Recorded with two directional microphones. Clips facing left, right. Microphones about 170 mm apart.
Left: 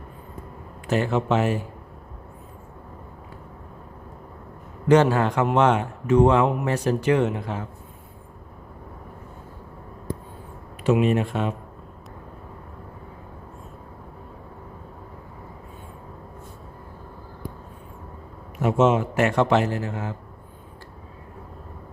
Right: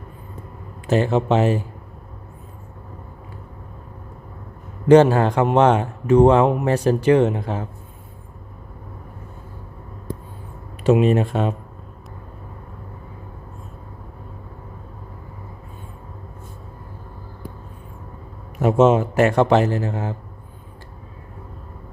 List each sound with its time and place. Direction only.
0.9 s speech: 30° right (ahead or behind)
4.9 s a man's voice: 30° right (ahead or behind)
10.8 s a man's voice: 35° right (ahead or behind)
18.6 s a man's voice: 35° right (ahead or behind)